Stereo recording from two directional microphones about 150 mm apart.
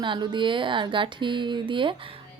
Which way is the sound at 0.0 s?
30° right (ahead or behind).